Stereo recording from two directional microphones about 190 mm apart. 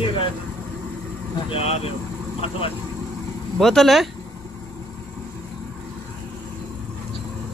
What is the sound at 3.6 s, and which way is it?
Speech, centre (ahead or behind).